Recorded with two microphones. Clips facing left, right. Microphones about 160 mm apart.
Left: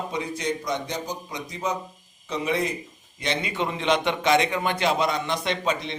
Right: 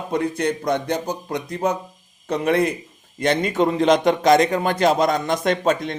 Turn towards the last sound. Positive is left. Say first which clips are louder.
# right 6 dB
turn(degrees=-50)  # may be behind; listen again after turning